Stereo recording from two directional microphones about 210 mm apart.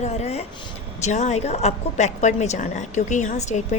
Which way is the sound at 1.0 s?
35° left (ahead or behind).